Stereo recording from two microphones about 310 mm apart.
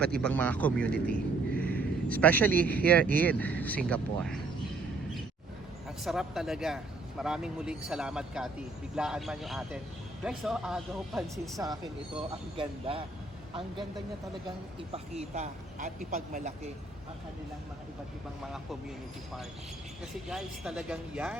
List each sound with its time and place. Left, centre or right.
0.2 s speech: centre
1.5 s a sound: centre
2.6 s speech: centre
6.1 s speech: centre; by 16.6 s right
20.2 s speech: centre